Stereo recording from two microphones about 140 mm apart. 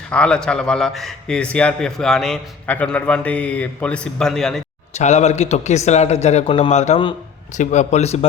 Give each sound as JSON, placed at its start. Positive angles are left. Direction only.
{"t": 0.1, "sound": "a man's voice", "side_deg": 5}
{"t": 4.9, "sound": "a man's voice", "side_deg": 55}